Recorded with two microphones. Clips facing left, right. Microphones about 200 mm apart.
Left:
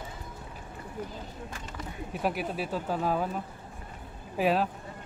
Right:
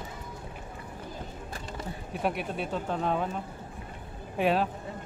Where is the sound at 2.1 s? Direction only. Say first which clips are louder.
Even; centre (ahead or behind).